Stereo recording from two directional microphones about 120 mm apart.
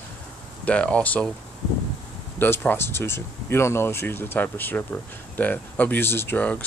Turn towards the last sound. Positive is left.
turn(degrees=10)  # may be behind; listen again after turning